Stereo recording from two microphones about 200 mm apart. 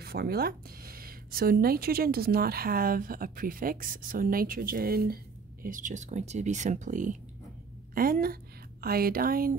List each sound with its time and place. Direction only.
0.0 s speech: 50° right (ahead or behind)